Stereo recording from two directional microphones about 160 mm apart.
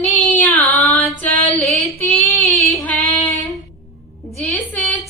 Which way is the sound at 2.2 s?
10° left (ahead or behind).